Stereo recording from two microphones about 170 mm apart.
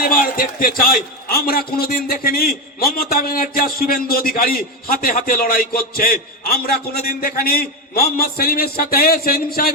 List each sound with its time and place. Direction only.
0.0 s a man's voice: 55° left (ahead or behind)